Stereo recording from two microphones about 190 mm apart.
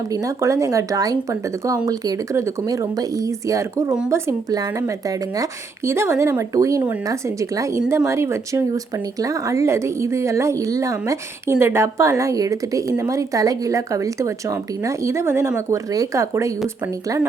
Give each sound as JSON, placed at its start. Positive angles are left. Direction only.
{"t": 0.1, "sound": "speech", "side_deg": -15}